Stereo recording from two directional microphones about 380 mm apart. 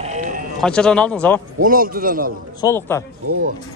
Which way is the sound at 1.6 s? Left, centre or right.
Right.